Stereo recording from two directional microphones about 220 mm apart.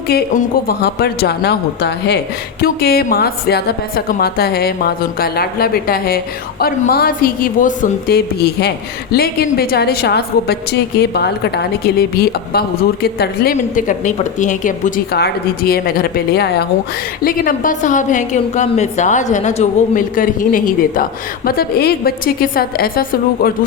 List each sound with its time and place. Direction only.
0.1 s a woman's voice: 45° left (ahead or behind)